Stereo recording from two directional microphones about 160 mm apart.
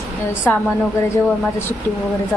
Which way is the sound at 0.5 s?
10° left (ahead or behind).